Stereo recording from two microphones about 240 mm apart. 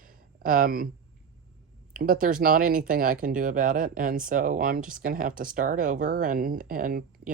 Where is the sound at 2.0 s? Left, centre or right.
Right.